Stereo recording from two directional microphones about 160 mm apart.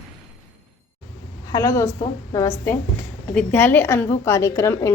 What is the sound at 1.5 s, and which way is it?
A woman's voice, 20° left (ahead or behind).